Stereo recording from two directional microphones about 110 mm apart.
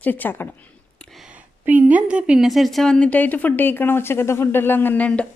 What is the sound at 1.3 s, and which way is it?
A woman's voice, 15° right (ahead or behind).